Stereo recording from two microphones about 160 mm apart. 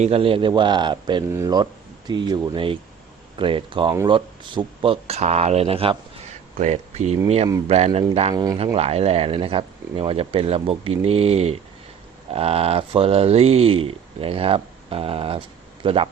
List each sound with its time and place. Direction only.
0.0 s a man's voice: 35° right (ahead or behind)
6.6 s speech: 45° right (ahead or behind)
8.3 s a man's voice: 25° right (ahead or behind)
8.5 s speech: 40° right (ahead or behind)